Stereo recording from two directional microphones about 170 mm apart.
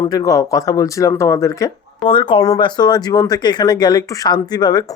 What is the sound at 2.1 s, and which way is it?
Speech, 30° left (ahead or behind).